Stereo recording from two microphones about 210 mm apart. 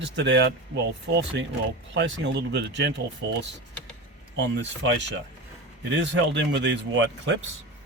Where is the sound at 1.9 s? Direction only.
60° right (ahead or behind).